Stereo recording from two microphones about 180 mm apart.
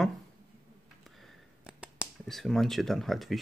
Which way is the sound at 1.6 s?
5° right (ahead or behind).